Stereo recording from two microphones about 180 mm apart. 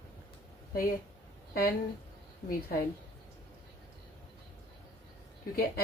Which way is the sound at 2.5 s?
55° left (ahead or behind).